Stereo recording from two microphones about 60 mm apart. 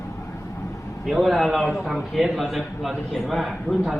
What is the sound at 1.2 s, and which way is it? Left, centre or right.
A man's voice, centre.